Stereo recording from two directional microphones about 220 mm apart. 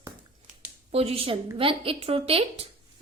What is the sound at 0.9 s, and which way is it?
A woman's voice, 25° right (ahead or behind).